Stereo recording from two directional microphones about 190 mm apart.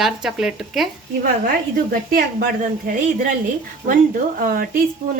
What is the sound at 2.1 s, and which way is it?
Speech, 50° right (ahead or behind).